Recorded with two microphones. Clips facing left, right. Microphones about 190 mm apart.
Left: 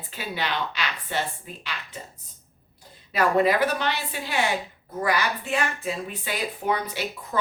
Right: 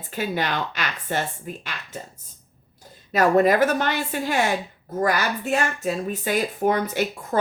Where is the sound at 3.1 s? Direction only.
45° right (ahead or behind).